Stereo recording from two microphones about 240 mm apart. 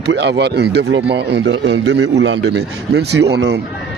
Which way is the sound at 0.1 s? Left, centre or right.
Right.